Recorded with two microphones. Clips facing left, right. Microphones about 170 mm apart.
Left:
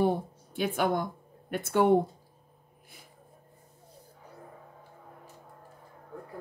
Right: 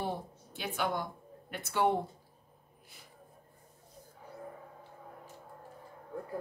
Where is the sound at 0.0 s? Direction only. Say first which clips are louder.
Left 10 dB; 50° left (ahead or behind).